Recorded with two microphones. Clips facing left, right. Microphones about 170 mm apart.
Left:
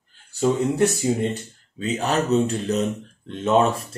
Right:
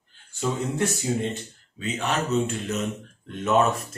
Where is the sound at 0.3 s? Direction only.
35° left (ahead or behind).